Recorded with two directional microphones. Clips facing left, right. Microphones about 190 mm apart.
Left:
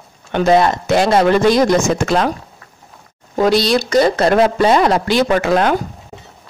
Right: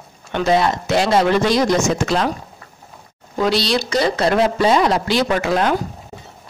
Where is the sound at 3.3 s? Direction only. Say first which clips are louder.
Left 4 dB; 50° left (ahead or behind).